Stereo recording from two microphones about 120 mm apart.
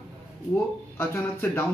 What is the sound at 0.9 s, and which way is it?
Speech, 20° left (ahead or behind).